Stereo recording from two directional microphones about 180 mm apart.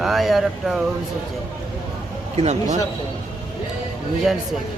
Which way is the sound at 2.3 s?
40° right (ahead or behind).